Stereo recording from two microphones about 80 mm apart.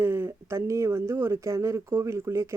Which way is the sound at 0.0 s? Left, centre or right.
Right.